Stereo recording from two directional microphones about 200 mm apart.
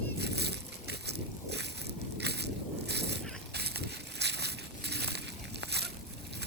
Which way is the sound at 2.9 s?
55° right (ahead or behind).